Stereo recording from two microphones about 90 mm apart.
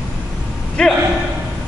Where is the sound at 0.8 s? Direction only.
10° left (ahead or behind).